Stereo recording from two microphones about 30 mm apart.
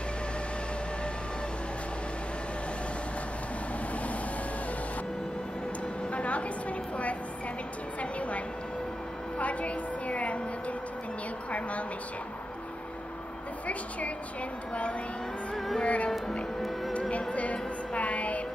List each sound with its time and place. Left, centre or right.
6.1 s a sound: left
8.0 s a sound: left
9.4 s a woman's voice: left
14.7 s a woman's voice: left
15.5 s music: centre
15.8 s a woman's voice: left
17.3 s music: left